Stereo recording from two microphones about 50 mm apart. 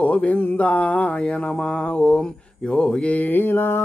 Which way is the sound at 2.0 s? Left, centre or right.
Centre.